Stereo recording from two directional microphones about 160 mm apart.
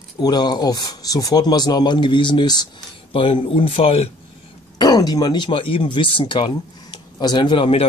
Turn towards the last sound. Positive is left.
turn(degrees=35)  # may be behind; listen again after turning